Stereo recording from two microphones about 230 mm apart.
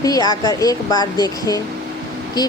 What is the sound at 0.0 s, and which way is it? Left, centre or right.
A woman's voice, centre.